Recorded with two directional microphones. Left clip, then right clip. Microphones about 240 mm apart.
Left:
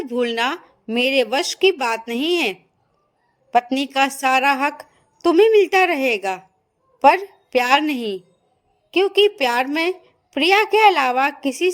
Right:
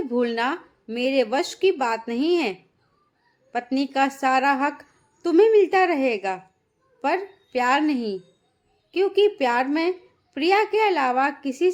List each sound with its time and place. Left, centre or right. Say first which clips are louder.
0.0 s speech: left 3 dB; left